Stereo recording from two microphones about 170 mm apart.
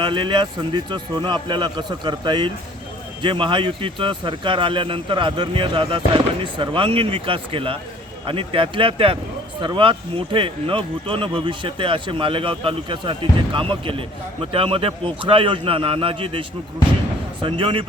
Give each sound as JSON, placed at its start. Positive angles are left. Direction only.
{"t": 0.0, "sound": "speech", "side_deg": -30}